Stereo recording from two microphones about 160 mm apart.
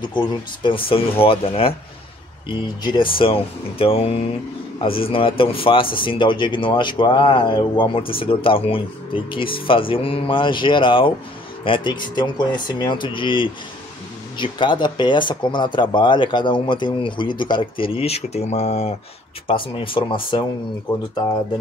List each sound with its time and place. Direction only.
0.7 s speech: 35° left (ahead or behind)
2.8 s speech: 30° left (ahead or behind)